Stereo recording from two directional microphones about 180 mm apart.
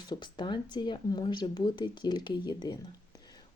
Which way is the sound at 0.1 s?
25° left (ahead or behind).